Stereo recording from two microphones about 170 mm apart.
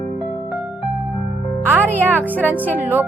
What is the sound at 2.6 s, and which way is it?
Speech, 10° right (ahead or behind).